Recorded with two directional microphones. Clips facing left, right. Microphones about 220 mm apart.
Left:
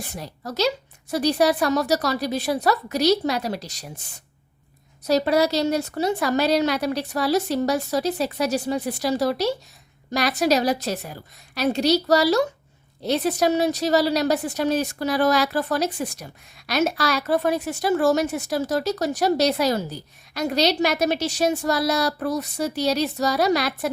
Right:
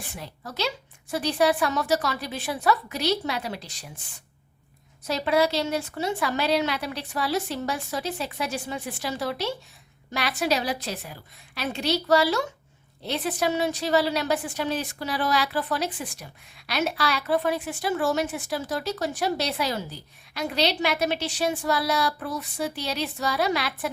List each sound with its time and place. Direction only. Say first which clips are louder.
0.1 s a woman's voice: left 5 dB; 40° left (ahead or behind)
5.0 s a woman's voice: left 4 dB; 40° left (ahead or behind)